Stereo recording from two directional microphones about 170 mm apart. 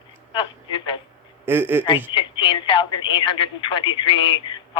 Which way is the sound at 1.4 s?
10° right (ahead or behind).